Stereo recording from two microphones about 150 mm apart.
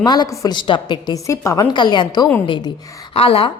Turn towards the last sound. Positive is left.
turn(degrees=40)  # may be behind; listen again after turning